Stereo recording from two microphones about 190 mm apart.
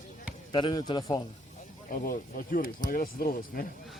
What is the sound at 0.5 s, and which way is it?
Speech, 25° left (ahead or behind).